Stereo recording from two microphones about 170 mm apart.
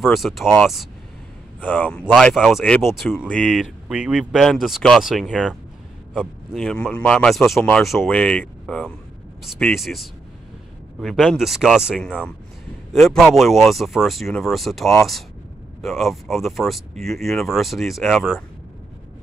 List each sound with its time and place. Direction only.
0.0 s speech: centre (ahead or behind)
1.6 s speech: 10° left (ahead or behind)
3.9 s speech: 5° right (ahead or behind)